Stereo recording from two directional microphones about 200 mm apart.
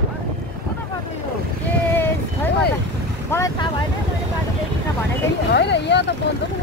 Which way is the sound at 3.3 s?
15° left (ahead or behind).